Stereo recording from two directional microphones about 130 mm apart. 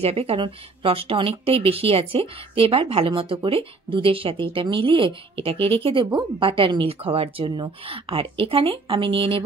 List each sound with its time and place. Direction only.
0.0 s a woman's voice: 50° right (ahead or behind)